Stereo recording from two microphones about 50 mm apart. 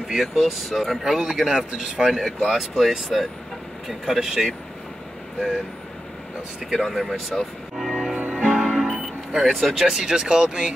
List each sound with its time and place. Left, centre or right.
0.2 s speech: centre
1.2 s speech: centre
6.7 s speech: centre
7.7 s music: centre
8.2 s music: right
9.4 s speech: centre